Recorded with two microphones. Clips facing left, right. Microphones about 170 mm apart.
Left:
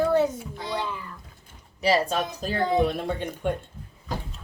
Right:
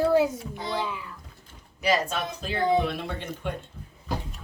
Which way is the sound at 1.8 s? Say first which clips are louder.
Left 3 dB; 30° left (ahead or behind).